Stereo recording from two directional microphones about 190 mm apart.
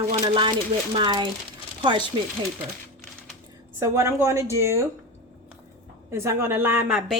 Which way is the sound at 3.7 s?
15° right (ahead or behind).